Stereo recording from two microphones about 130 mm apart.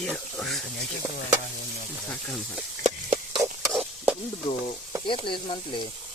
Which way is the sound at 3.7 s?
15° right (ahead or behind).